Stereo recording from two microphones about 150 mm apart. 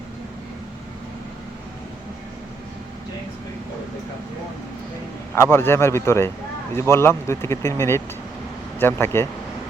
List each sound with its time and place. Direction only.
5.3 s speech: 15° left (ahead or behind)